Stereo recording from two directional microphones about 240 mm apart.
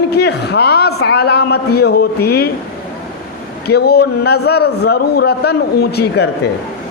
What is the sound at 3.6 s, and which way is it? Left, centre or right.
A man's voice, left.